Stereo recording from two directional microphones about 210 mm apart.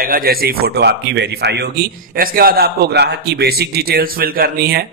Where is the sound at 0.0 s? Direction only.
45° right (ahead or behind).